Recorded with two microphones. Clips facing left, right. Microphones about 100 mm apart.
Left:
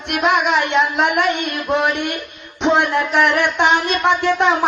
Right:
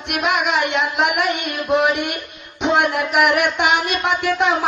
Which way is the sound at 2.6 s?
5° right (ahead or behind).